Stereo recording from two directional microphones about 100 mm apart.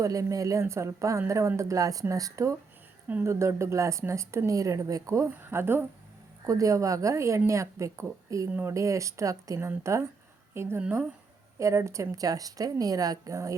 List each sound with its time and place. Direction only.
0.0 s speech: 35° right (ahead or behind)
5.3 s speech: 25° right (ahead or behind)
6.4 s a woman's voice: 35° right (ahead or behind)